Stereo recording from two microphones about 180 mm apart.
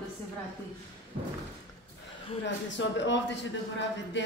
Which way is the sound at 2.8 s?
85° left.